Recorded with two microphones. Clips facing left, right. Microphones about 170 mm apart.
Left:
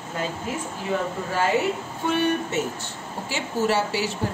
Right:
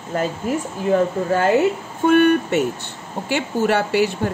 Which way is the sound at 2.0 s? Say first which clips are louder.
Right 9 dB; 60° right (ahead or behind).